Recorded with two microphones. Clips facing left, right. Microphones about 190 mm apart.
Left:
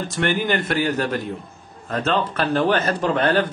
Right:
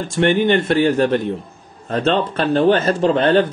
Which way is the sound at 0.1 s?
25° right (ahead or behind).